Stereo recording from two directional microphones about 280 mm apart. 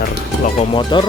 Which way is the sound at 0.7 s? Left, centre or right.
Centre.